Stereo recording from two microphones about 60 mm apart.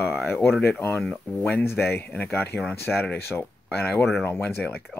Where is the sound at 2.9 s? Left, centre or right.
Centre.